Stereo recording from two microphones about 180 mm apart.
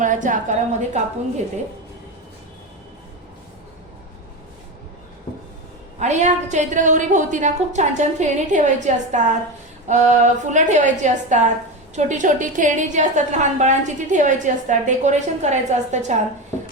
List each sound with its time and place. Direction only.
0.0 s a woman's voice: 45° right (ahead or behind)
6.0 s a woman's voice: 40° right (ahead or behind)